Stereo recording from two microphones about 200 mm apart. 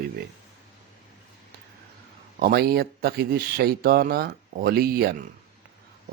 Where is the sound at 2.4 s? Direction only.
50° right (ahead or behind).